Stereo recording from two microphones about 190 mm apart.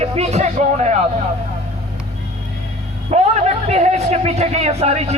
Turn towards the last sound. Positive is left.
turn(degrees=-35)  # may be behind; listen again after turning